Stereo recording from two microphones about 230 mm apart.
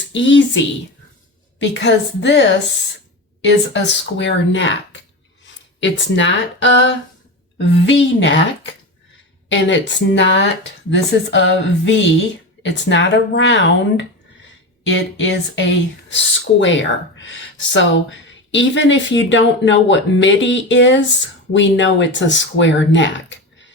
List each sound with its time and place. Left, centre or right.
0.1 s speech: left
8.2 s speech: left